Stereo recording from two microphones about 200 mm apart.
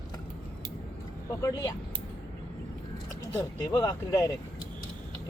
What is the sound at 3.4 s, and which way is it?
Speech, 20° left (ahead or behind).